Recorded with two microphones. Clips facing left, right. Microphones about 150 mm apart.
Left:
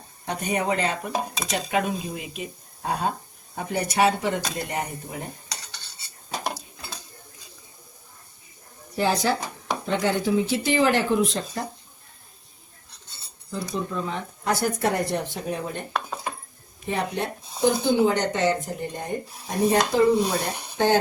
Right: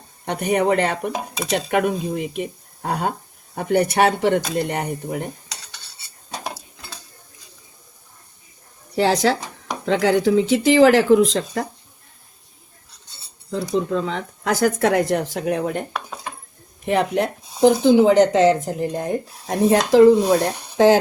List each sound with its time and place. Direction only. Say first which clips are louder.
0.3 s speech: right 7 dB; 60° right (ahead or behind)
9.0 s speech: right 5 dB; 90° right
13.5 s speech: right 8 dB; 90° right
15.9 s cutlery: left 1 dB; centre (ahead or behind)
16.8 s speech: right 8 dB; 90° right